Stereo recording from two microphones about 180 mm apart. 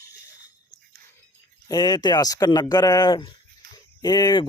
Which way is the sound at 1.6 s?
20° left (ahead or behind).